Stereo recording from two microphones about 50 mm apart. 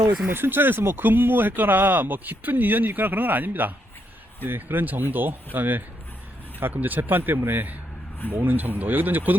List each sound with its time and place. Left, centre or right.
0.1 s speech: right